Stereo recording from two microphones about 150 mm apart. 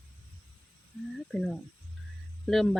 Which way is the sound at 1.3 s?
Centre (ahead or behind).